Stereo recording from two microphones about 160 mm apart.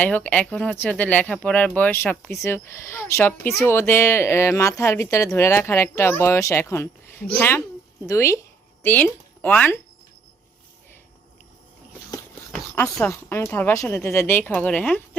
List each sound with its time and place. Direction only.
0.0 s speech: 10° left (ahead or behind)
13.1 s speech: 15° left (ahead or behind)